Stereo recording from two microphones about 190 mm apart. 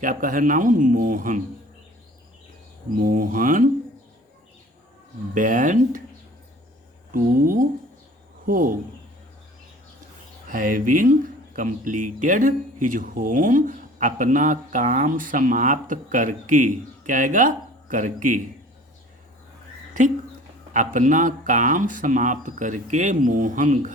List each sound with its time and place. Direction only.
0.0 s speech: 45° right (ahead or behind)
3.0 s speech: 45° right (ahead or behind)
5.3 s speech: 45° right (ahead or behind)
7.1 s speech: 45° right (ahead or behind)
10.5 s speech: 45° right (ahead or behind)
20.0 s speech: 40° right (ahead or behind)